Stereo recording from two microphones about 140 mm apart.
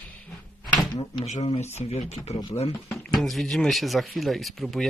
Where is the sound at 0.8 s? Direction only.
30° left (ahead or behind).